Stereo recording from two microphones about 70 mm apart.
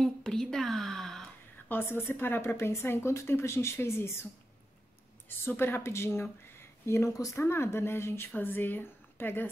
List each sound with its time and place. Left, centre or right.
0.0 s a sound: centre
1.7 s speech: left
2.5 s speech: left
5.5 s speech: left
6.9 s speech: left
7.4 s speech: left